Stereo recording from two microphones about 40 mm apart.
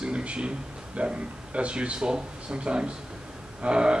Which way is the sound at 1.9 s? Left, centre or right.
Centre.